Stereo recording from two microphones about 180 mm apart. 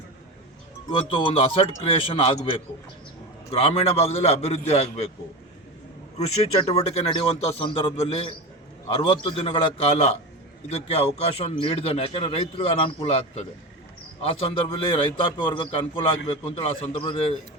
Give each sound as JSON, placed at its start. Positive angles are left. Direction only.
{"t": 0.9, "sound": "a man's voice", "side_deg": 25}
{"t": 6.7, "sound": "a man's voice", "side_deg": 35}